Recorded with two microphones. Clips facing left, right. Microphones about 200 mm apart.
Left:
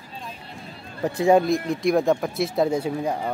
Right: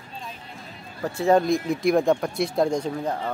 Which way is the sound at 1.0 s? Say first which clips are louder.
Left 2 dB; 15° left (ahead or behind).